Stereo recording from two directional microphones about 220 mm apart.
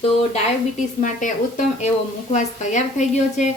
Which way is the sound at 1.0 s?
35° left (ahead or behind).